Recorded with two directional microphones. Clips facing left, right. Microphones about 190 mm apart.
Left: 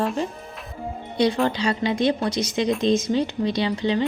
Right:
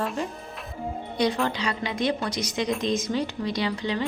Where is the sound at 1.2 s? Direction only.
30° left (ahead or behind).